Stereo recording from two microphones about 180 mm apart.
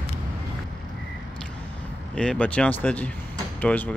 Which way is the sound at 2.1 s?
5° left (ahead or behind).